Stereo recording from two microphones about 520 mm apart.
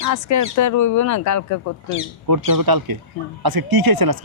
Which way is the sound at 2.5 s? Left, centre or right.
Right.